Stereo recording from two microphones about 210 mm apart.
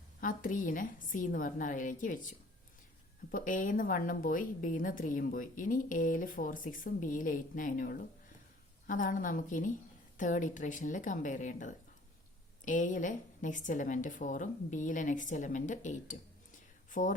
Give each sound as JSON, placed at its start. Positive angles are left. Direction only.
{"t": 0.2, "sound": "a woman's voice", "side_deg": 40}
{"t": 3.3, "sound": "a woman's voice", "side_deg": 40}